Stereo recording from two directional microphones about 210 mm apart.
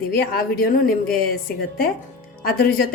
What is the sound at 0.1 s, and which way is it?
A woman's voice, 45° left (ahead or behind).